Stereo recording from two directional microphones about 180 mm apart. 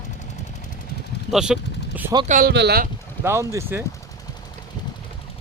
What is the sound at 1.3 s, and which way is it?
Speech, 5° right (ahead or behind).